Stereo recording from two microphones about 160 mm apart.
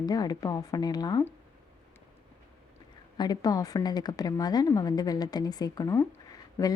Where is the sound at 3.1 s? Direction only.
25° left (ahead or behind).